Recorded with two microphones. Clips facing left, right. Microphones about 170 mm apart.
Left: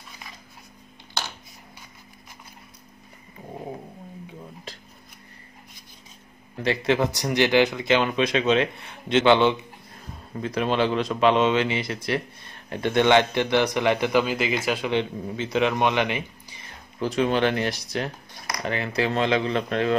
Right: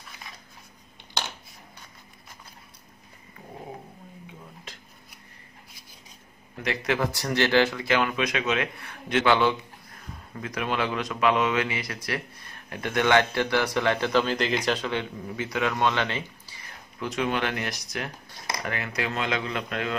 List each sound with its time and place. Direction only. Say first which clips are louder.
4.7 s dishes: left 5 dB; 35° left (ahead or behind)
6.6 s a man's voice: left 4 dB; 25° left (ahead or behind); by 14.9 s 10° left (ahead or behind)
14.9 s a man's voice: left 5 dB; 25° left (ahead or behind)
17.0 s speech: left 6 dB; 30° left (ahead or behind)